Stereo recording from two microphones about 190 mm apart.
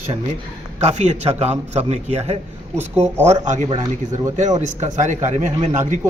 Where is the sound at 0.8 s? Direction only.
35° right (ahead or behind).